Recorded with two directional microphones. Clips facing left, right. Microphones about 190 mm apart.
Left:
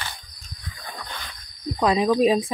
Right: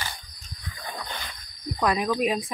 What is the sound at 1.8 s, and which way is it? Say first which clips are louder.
Speech: left 5 dB; 25° left (ahead or behind).